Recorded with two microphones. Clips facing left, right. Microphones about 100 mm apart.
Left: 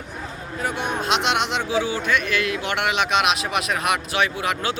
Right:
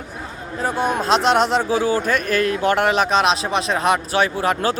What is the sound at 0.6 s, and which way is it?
Speech, 35° right (ahead or behind).